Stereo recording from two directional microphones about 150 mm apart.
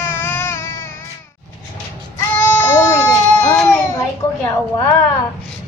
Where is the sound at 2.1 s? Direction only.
15° left (ahead or behind).